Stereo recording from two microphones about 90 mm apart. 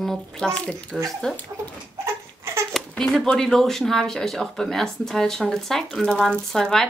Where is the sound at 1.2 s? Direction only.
10° left (ahead or behind).